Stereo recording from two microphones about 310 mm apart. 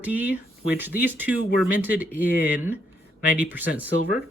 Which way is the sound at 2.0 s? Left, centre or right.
Left.